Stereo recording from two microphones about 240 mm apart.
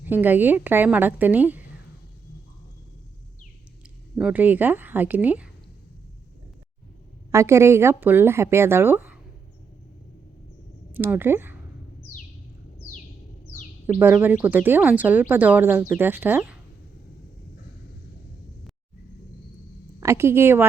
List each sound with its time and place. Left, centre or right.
0.1 s speech: centre
4.2 s speech: centre
7.3 s speech: centre
10.9 s speech: centre
14.0 s speech: centre
20.0 s speech: centre